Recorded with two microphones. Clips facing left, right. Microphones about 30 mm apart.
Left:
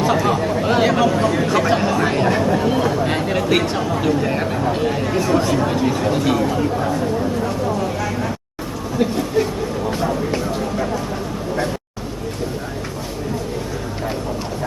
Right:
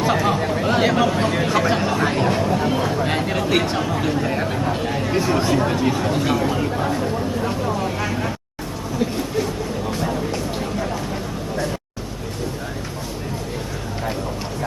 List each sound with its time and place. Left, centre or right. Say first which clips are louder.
0.0 s chatter: left 2 dB; centre
0.7 s speech: left 2 dB; centre
1.5 s speech: left 2 dB; centre
2.6 s chatter: left 3 dB; centre
4.5 s speech: left 3 dB; centre
5.1 s speech: left 1 dB; centre
5.5 s speech: left 1 dB; centre
6.4 s speech: left 2 dB; centre
7.4 s a sound: left 2 dB; centre
9.0 s a sound: left 4 dB; left